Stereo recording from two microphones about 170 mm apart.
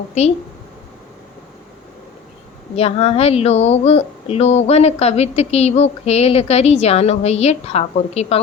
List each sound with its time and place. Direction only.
0.1 s a woman's voice: 40° left (ahead or behind)
2.7 s a woman's voice: 35° left (ahead or behind)